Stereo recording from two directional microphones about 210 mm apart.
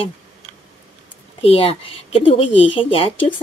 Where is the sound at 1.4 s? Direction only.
25° left (ahead or behind).